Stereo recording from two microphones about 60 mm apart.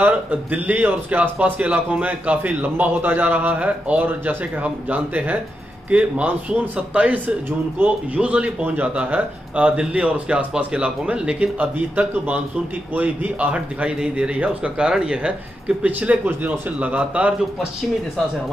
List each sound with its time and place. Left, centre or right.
0.0 s speech: right